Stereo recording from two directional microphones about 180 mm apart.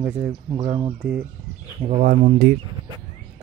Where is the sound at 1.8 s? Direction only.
40° right (ahead or behind).